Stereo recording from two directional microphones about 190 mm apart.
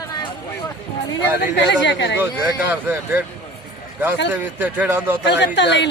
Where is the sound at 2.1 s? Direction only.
10° right (ahead or behind).